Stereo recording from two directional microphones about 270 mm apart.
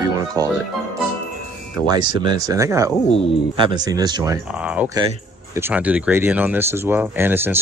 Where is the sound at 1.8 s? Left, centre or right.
Centre.